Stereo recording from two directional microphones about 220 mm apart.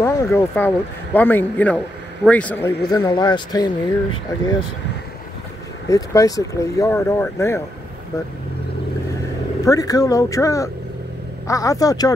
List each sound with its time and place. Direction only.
0.0 s speech: 10° left (ahead or behind)
5.9 s speech: 15° left (ahead or behind)
9.7 s speech: 15° left (ahead or behind)